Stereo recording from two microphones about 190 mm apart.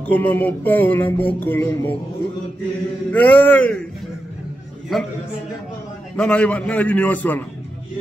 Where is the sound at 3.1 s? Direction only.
10° left (ahead or behind).